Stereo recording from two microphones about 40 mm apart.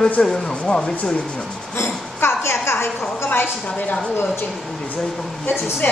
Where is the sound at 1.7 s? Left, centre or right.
Left.